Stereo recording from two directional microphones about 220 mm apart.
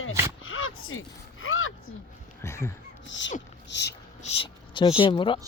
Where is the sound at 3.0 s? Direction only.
55° left (ahead or behind).